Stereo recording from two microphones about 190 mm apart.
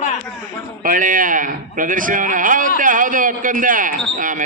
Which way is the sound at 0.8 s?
45° right (ahead or behind).